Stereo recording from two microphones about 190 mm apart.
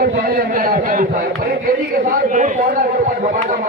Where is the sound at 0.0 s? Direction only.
50° right (ahead or behind).